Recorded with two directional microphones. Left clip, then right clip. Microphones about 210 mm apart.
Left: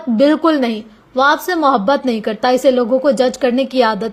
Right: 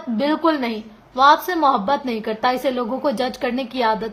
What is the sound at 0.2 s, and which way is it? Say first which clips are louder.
A woman's voice: left 6 dB; 25° left (ahead or behind).